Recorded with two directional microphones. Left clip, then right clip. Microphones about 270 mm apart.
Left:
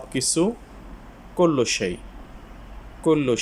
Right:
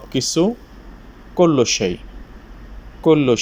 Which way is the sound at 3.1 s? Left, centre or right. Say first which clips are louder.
Right 6 dB; centre.